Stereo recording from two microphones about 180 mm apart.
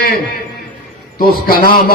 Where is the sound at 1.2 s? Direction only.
55° left (ahead or behind).